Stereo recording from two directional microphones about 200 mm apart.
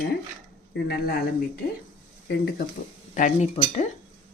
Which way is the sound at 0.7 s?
55° left (ahead or behind).